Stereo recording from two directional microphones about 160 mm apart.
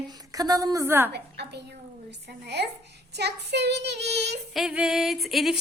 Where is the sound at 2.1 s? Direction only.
90° right.